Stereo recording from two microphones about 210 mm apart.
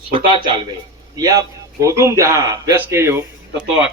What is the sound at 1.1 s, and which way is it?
Speech, 15° right (ahead or behind).